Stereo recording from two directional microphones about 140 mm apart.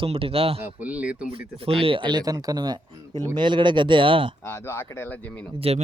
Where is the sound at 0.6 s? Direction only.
15° right (ahead or behind).